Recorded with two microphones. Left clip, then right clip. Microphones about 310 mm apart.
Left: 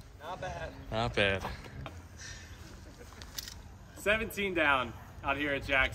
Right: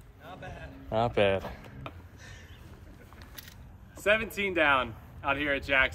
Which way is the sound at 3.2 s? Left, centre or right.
Centre.